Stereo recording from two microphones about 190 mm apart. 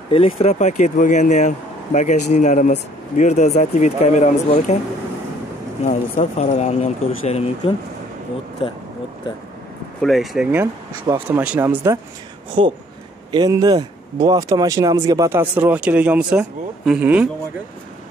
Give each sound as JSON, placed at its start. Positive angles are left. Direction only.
{"t": 0.4, "sound": "speech", "side_deg": 35}
{"t": 5.9, "sound": "speech", "side_deg": 40}
{"t": 10.0, "sound": "speech", "side_deg": 0}
{"t": 12.6, "sound": "speech", "side_deg": -30}